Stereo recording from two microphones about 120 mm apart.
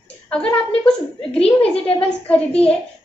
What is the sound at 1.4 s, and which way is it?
Speech, 55° left (ahead or behind).